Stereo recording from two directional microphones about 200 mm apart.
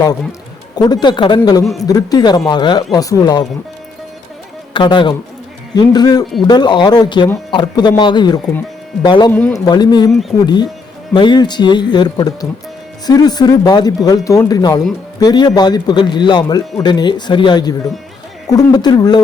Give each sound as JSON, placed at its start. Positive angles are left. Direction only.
{"t": 0.8, "sound": "a man's voice", "side_deg": 20}
{"t": 4.7, "sound": "a man's voice", "side_deg": 25}
{"t": 9.3, "sound": "speech", "side_deg": 10}
{"t": 9.6, "sound": "a man's voice", "side_deg": 20}
{"t": 10.1, "sound": "speech", "side_deg": 0}
{"t": 10.4, "sound": "a man's voice", "side_deg": 20}